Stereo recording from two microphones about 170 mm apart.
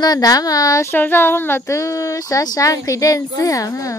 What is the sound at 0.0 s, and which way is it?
Speech, 20° left (ahead or behind).